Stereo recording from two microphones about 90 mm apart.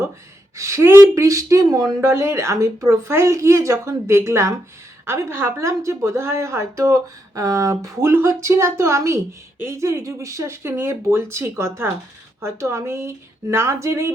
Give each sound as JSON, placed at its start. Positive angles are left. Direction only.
{"t": 0.5, "sound": "speech", "side_deg": -35}